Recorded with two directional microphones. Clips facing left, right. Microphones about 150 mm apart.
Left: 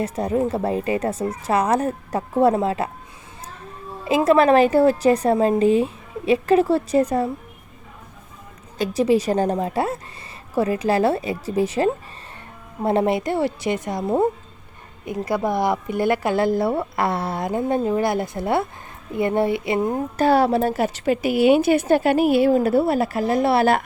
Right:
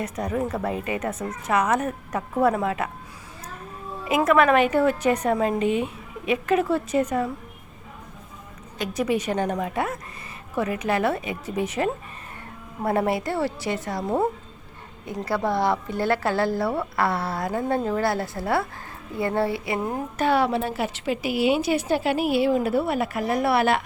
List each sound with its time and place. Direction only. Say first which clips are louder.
0.0 s a woman's voice: left 5 dB; 30° left (ahead or behind)
4.0 s a woman's voice: left 3 dB; 30° left (ahead or behind)
8.8 s a woman's voice: left 6 dB; 30° left (ahead or behind)
20.1 s a woman's voice: left 4 dB; 40° left (ahead or behind)